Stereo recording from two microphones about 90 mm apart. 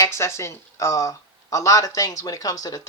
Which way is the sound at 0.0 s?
30° left (ahead or behind).